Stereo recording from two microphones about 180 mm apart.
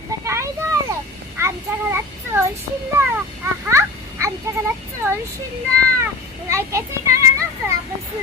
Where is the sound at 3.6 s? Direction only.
15° right (ahead or behind).